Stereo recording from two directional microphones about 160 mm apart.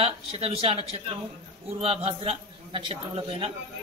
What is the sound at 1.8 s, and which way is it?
A man's voice, 35° right (ahead or behind).